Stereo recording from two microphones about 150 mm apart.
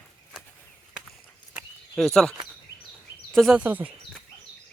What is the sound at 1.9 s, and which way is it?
Speech, 5° left (ahead or behind).